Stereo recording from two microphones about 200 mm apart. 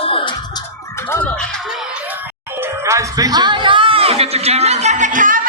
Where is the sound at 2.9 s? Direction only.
15° right (ahead or behind); by 5.4 s 40° right (ahead or behind).